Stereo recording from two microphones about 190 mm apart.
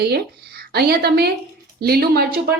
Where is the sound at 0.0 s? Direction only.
55° right (ahead or behind).